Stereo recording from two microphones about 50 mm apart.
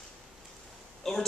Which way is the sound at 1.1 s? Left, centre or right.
Centre.